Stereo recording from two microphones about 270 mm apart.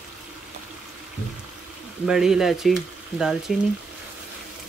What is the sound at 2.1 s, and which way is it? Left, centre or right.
Speech, centre.